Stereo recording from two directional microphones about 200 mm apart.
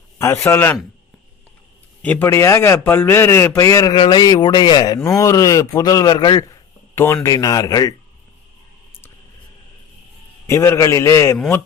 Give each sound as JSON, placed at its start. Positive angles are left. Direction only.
{"t": 0.2, "sound": "a man's voice", "side_deg": 15}
{"t": 2.0, "sound": "a man's voice", "side_deg": 10}
{"t": 10.4, "sound": "a man's voice", "side_deg": 15}